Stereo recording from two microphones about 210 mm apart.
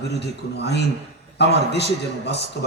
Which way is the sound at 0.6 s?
50° left (ahead or behind).